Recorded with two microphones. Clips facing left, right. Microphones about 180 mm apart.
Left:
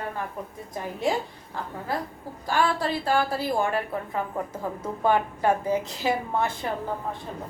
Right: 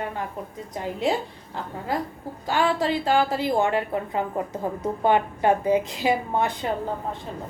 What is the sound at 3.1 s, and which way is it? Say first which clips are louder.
A woman's voice: right 2 dB; 20° right (ahead or behind).